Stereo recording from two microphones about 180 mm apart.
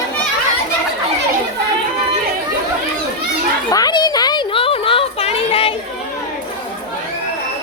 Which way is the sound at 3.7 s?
20° left (ahead or behind).